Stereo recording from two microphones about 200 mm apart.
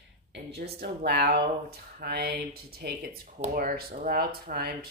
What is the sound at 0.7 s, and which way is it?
Speech, 55° right (ahead or behind).